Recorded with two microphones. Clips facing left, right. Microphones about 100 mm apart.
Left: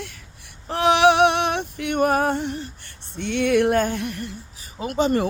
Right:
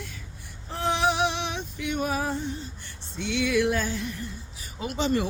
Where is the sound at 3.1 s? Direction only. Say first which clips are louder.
Left 5 dB; 55° left (ahead or behind).